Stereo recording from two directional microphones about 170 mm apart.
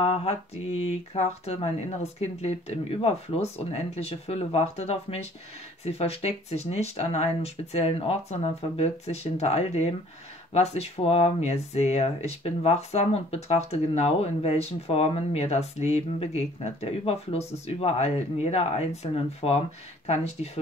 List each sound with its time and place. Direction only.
0.0 s speech: 35° left (ahead or behind)